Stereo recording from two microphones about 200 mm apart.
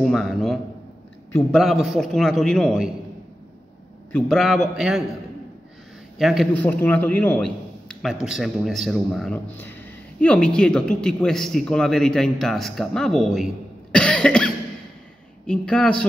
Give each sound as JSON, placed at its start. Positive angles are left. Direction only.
{"t": 0.0, "sound": "speech", "side_deg": 0}
{"t": 4.1, "sound": "speech", "side_deg": 0}
{"t": 6.1, "sound": "a man's voice", "side_deg": 0}
{"t": 13.9, "sound": "cough", "side_deg": 5}
{"t": 15.4, "sound": "speech", "side_deg": 5}